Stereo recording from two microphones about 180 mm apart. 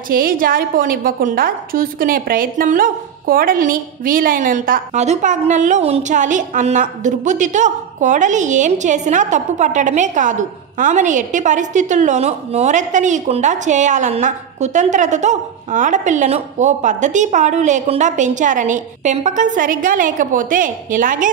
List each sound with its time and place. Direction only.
0.1 s a woman's voice: 50° right (ahead or behind)